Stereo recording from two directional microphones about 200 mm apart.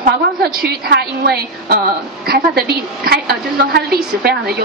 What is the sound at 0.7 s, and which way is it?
A woman's voice, 55° right (ahead or behind).